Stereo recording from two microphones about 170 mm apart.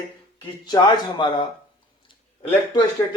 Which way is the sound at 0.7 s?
25° left (ahead or behind).